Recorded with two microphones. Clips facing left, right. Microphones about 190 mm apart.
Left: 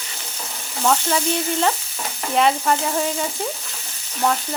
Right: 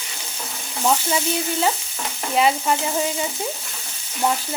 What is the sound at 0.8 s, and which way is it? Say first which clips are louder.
Frying: left 1 dB; 10° right (ahead or behind).